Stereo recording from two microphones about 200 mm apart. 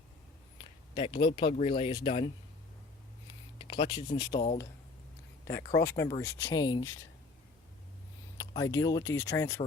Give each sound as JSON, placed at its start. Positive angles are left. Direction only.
{"t": 0.6, "sound": "speech", "side_deg": 25}
{"t": 3.6, "sound": "speech", "side_deg": 25}
{"t": 5.5, "sound": "speech", "side_deg": 15}
{"t": 8.4, "sound": "speech", "side_deg": 15}